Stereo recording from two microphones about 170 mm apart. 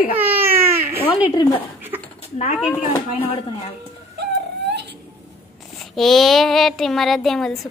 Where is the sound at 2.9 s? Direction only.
35° left (ahead or behind).